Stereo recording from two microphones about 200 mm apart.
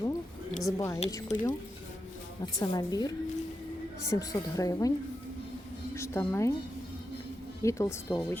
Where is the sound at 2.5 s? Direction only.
15° left (ahead or behind).